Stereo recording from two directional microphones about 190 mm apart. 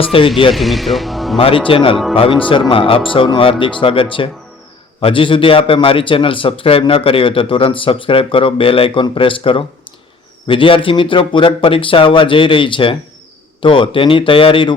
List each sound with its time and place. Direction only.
0.0 s a man's voice: 30° left (ahead or behind)
0.5 s speech: centre (ahead or behind)
1.4 s a man's voice: 30° left (ahead or behind)